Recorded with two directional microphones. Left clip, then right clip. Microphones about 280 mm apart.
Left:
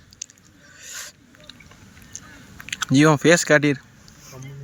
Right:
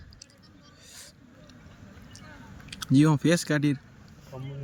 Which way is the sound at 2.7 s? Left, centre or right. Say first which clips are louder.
Left 7 dB; centre.